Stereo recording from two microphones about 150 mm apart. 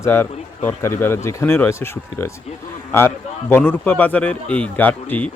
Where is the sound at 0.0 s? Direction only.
15° left (ahead or behind).